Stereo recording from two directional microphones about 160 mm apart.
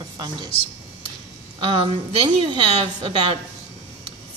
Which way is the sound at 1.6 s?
35° right (ahead or behind).